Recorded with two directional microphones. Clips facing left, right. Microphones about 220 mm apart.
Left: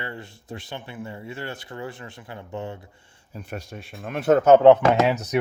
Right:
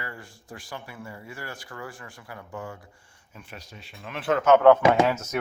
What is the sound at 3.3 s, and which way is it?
Speech, 40° left (ahead or behind).